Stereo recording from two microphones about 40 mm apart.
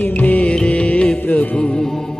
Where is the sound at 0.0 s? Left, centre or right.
Left.